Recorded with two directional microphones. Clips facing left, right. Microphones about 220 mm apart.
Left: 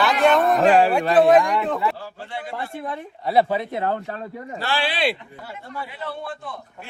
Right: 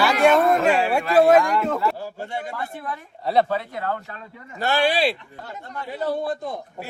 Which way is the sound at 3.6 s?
20° left (ahead or behind).